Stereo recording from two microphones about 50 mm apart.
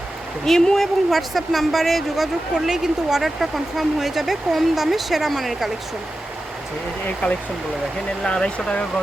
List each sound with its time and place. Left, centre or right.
0.4 s speech: centre
8.2 s speech: centre